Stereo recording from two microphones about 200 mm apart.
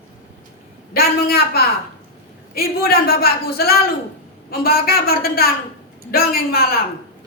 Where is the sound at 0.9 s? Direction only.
50° left (ahead or behind).